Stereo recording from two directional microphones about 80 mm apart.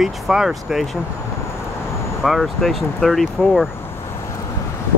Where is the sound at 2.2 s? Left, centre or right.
Centre.